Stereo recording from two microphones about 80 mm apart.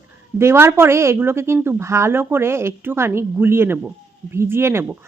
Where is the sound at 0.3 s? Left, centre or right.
Right.